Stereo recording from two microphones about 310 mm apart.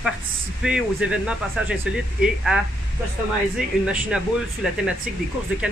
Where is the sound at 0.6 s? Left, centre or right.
Centre.